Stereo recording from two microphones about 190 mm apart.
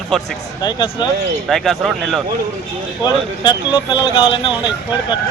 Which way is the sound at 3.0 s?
20° left (ahead or behind).